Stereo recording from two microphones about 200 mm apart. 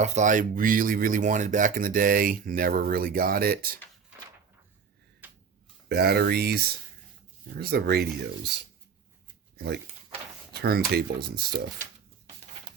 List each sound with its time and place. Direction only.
0.0 s speech: 35° right (ahead or behind)
5.2 s tick-tock: 10° right (ahead or behind)
5.9 s speech: 50° right (ahead or behind)
9.6 s speech: 55° right (ahead or behind)